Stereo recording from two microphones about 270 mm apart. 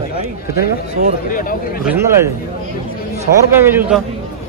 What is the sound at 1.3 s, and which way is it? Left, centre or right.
Speech, left.